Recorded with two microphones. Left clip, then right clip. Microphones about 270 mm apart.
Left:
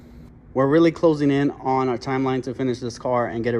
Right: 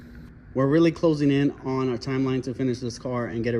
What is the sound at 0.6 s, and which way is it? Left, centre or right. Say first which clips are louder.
Speech: left 4 dB; centre.